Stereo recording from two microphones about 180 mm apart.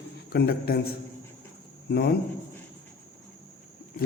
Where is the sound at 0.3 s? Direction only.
55° left (ahead or behind).